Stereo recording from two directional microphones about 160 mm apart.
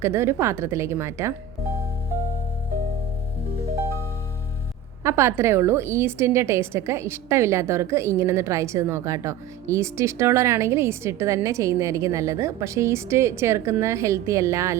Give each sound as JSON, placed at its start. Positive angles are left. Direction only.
{"t": 0.0, "sound": "a woman's voice", "side_deg": -15}
{"t": 5.0, "sound": "a woman's voice", "side_deg": -15}